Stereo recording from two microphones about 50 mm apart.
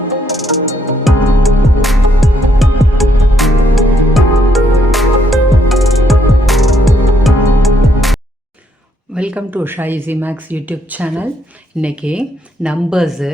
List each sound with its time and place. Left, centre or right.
0.3 s music: centre
9.1 s a sound: right
9.5 s speech: right; by 13.3 s centre